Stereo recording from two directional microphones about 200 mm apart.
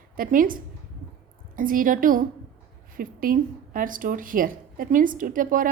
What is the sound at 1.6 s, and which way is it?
A woman's voice, 45° right (ahead or behind).